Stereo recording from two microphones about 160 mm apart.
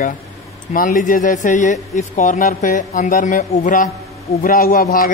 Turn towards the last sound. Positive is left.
turn(degrees=60)  # may be behind; listen again after turning